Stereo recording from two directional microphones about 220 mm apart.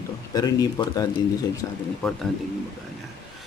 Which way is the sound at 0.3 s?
15° left (ahead or behind).